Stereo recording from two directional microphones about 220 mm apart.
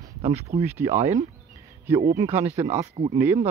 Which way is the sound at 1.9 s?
10° right (ahead or behind).